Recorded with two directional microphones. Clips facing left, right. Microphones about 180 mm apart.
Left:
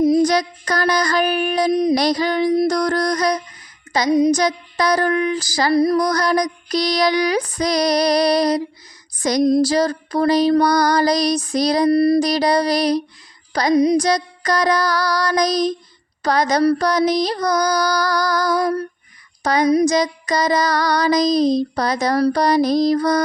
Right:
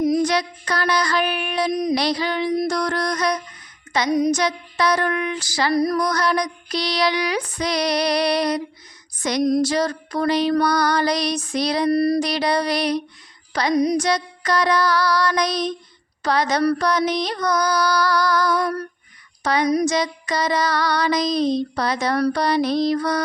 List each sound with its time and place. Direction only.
0.0 s child singing: 30° left (ahead or behind)
2.0 s female singing: 45° left (ahead or behind)
3.9 s a sound: 35° left (ahead or behind)
4.2 s female singing: 35° left (ahead or behind)
11.9 s a sound: 25° left (ahead or behind)
12.3 s female singing: 40° left (ahead or behind)
19.4 s a woman's voice: 40° left (ahead or behind)
19.6 s female singing: 30° left (ahead or behind)